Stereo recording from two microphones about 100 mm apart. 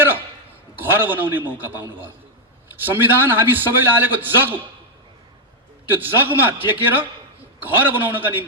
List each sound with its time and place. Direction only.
0.8 s a man's voice: 20° right (ahead or behind)
2.8 s a man's voice: 20° right (ahead or behind)
5.9 s a man's voice: 20° right (ahead or behind)